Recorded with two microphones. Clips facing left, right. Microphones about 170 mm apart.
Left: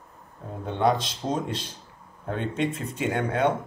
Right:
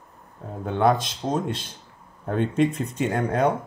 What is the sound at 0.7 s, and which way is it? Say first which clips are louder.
Speech: right 3 dB; 50° right (ahead or behind).